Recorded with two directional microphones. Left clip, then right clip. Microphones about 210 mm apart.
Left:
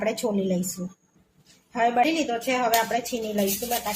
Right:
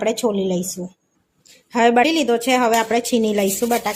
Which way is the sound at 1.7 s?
50° right (ahead or behind).